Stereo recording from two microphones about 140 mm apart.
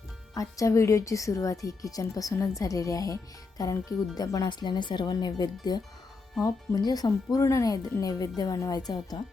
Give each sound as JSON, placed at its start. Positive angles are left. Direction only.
{"t": 0.3, "sound": "speech", "side_deg": 25}